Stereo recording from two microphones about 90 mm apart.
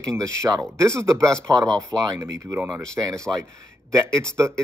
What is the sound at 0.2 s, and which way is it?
Speech, 35° right (ahead or behind).